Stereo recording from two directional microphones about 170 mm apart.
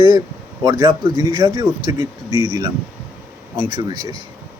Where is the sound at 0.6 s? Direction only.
25° right (ahead or behind).